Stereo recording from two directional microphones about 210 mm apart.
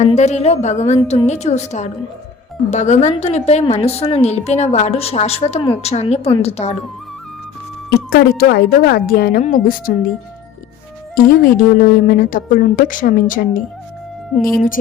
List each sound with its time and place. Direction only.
0.2 s a woman's voice: 30° left (ahead or behind)
7.9 s a woman's voice: 45° left (ahead or behind)
11.1 s a woman's voice: 40° left (ahead or behind)